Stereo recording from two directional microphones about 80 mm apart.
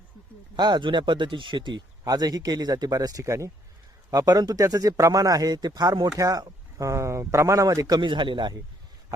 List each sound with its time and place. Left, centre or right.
0.5 s speech: right
2.0 s speech: right
4.1 s speech: right
8.0 s a man's voice: right